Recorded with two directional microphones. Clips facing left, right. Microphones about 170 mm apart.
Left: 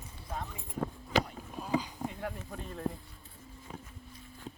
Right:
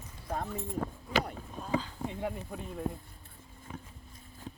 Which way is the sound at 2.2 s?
15° right (ahead or behind).